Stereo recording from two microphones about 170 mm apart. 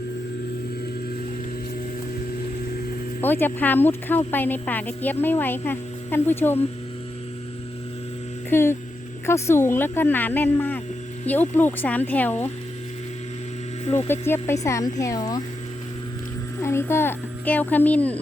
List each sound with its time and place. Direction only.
3.2 s speech: 10° left (ahead or behind)
8.4 s speech: 15° left (ahead or behind)
14.1 s speech: 15° left (ahead or behind)
16.6 s speech: 15° left (ahead or behind)